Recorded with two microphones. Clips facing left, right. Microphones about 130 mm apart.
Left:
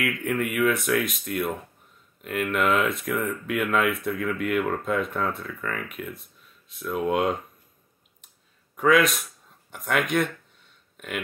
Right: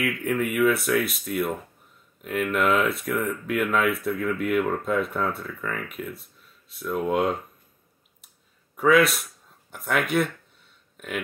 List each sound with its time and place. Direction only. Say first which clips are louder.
0.0 s speech: right 1 dB; centre (ahead or behind)
8.7 s speech: right 1 dB; 5° right (ahead or behind)
11.0 s burping: right 1 dB; 5° right (ahead or behind)